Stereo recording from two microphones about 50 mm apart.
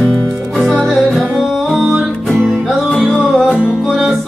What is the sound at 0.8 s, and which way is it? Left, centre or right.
Music, centre.